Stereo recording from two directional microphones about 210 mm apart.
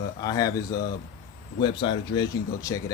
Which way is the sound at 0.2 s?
15° left (ahead or behind).